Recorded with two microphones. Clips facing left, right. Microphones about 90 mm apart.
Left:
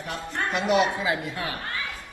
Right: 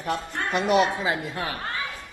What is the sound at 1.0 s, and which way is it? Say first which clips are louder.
Speech: even; 30° right (ahead or behind).